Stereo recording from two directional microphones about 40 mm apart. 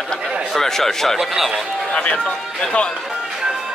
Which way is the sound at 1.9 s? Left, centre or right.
Left.